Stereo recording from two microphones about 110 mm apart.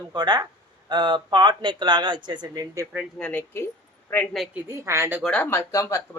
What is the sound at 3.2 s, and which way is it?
Speech, 10° left (ahead or behind).